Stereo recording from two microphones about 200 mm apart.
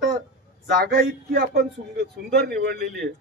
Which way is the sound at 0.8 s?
50° right (ahead or behind).